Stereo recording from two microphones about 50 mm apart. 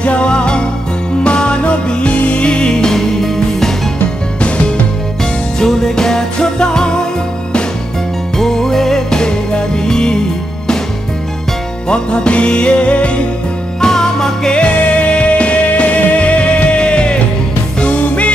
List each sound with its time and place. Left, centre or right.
0.0 s music: left
4.4 s music: left
5.6 s music: centre
8.4 s music: centre
11.9 s music: centre
13.7 s music: centre
14.5 s music: left